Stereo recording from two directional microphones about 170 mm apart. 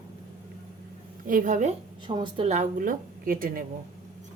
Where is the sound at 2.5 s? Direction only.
45° right (ahead or behind).